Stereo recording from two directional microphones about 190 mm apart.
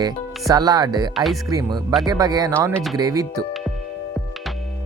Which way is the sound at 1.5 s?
20° right (ahead or behind).